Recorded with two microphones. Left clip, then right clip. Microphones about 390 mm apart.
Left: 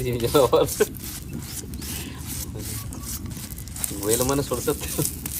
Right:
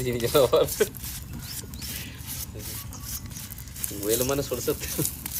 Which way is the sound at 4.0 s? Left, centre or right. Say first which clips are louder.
Left 3 dB; centre.